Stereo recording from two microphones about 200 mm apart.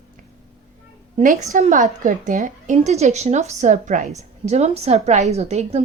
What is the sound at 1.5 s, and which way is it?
A woman's voice, 40° right (ahead or behind).